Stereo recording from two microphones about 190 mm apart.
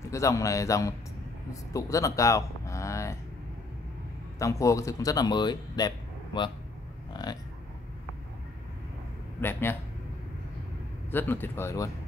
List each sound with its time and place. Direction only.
0.1 s a man's voice: 15° left (ahead or behind)
1.7 s a sound: 15° left (ahead or behind)
4.4 s speech: 15° left (ahead or behind)
7.2 s a sound: 25° left (ahead or behind)
9.4 s a man's voice: 10° left (ahead or behind)
11.1 s a man's voice: 10° left (ahead or behind)